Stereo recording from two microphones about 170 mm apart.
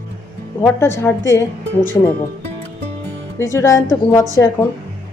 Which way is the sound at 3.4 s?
15° left (ahead or behind).